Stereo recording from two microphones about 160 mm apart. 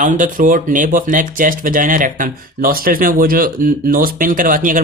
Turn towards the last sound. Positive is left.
turn(degrees=-60)  # may be behind; listen again after turning